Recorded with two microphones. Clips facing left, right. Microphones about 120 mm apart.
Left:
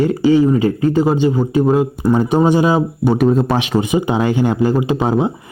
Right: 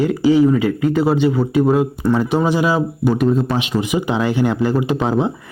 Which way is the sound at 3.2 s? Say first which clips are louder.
Left 3 dB; 55° left (ahead or behind).